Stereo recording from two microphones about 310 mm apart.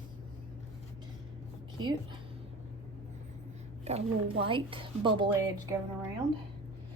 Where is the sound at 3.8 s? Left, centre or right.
Centre.